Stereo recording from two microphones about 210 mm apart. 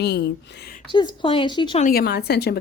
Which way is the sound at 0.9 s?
20° left (ahead or behind).